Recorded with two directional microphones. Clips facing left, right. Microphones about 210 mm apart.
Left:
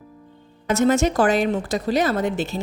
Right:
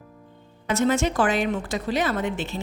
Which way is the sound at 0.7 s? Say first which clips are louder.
Left 4 dB; 45° left (ahead or behind).